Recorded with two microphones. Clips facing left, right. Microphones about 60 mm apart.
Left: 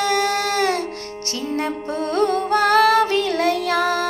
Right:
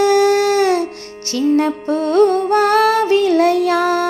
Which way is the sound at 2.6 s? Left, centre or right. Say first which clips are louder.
Left 1 dB; left.